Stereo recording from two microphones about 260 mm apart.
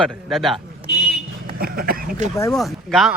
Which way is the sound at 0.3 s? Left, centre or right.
Centre.